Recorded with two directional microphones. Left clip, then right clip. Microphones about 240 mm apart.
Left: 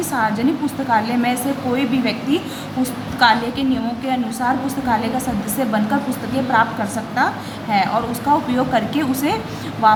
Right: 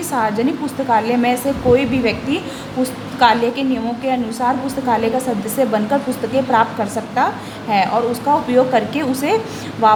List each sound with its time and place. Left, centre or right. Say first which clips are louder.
0.1 s a woman's voice: right 2 dB; centre